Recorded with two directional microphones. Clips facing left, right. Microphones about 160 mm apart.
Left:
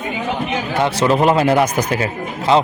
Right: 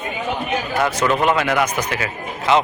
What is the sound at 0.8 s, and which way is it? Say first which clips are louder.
Speech: left 4 dB; 30° left (ahead or behind).